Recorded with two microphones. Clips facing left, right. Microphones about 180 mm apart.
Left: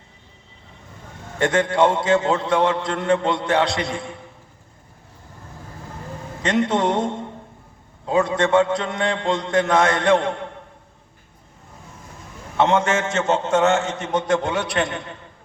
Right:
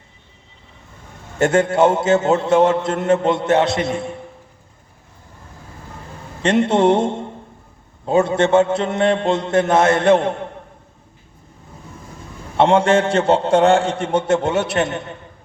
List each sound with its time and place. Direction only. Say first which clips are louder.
1.4 s a man's voice: right 3 dB; 25° right (ahead or behind)
6.5 s a man's voice: right 5 dB; 25° right (ahead or behind)
12.5 s a man's voice: right 5 dB; 30° right (ahead or behind)